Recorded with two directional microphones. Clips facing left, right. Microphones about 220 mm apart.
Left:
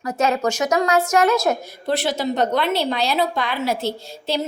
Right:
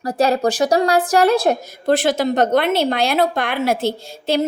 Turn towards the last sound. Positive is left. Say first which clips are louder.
# right 4 dB
turn(degrees=-50)  # may be behind; listen again after turning